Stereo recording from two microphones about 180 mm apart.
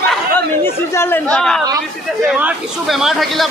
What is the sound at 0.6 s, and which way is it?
A man's voice, 10° left (ahead or behind).